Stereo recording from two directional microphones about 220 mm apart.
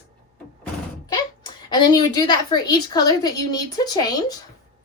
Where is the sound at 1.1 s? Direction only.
20° left (ahead or behind).